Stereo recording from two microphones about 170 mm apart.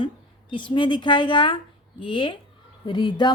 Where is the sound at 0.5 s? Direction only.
30° left (ahead or behind).